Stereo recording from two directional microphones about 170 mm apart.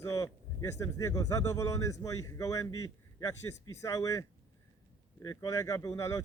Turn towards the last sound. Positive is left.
turn(degrees=15)  # may be behind; listen again after turning